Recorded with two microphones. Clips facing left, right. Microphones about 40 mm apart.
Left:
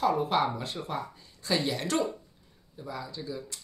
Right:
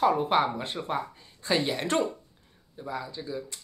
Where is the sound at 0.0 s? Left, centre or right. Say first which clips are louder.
Right 3 dB; right.